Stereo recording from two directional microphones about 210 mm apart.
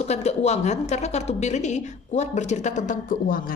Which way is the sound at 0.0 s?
30° left (ahead or behind).